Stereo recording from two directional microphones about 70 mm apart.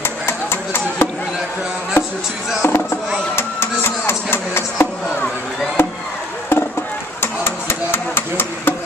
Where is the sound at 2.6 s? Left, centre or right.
Left.